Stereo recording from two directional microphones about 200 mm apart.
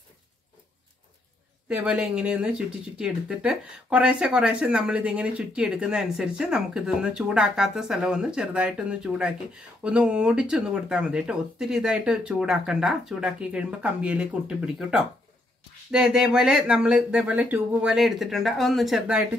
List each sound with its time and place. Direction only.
1.7 s speech: 5° right (ahead or behind)
15.9 s speech: 5° right (ahead or behind)